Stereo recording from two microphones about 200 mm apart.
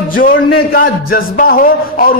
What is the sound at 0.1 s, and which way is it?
Music, 45° left (ahead or behind).